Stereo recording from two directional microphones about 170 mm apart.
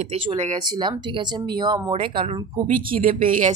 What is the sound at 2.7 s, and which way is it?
Speech, 55° right (ahead or behind).